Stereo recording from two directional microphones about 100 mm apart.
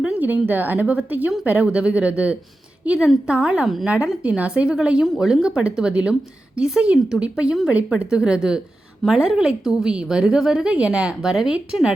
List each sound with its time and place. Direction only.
0.0 s a woman's voice: 15° right (ahead or behind)